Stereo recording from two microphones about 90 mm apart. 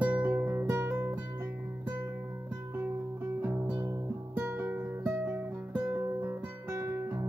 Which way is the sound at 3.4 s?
20° right (ahead or behind).